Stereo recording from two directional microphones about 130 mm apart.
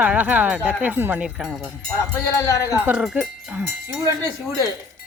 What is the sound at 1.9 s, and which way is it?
Speech, 25° left (ahead or behind).